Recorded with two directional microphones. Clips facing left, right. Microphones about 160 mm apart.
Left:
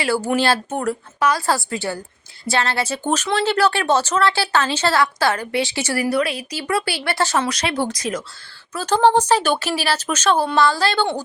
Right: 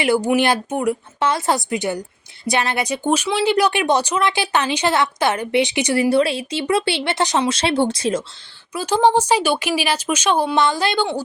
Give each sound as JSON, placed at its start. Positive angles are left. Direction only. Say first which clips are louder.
{"t": 0.0, "sound": "speech", "louder": "right 3 dB", "side_deg": -15}
{"t": 1.2, "sound": "a woman's voice", "louder": "even", "side_deg": -25}
{"t": 8.7, "sound": "speech", "louder": "even", "side_deg": -10}